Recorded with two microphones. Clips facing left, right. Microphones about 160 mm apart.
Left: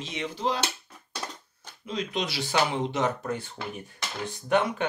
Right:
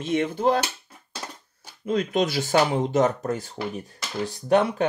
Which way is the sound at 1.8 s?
50° right (ahead or behind).